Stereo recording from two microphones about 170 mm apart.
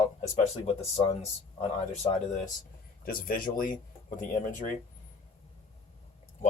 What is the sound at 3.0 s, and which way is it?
Speech, 55° left (ahead or behind).